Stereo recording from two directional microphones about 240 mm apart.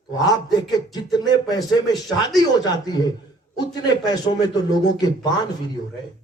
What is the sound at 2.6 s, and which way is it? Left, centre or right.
A man's voice, centre.